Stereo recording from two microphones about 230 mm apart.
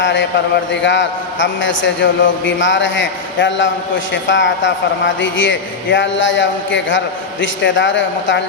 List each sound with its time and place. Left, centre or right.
0.0 s a man's voice: left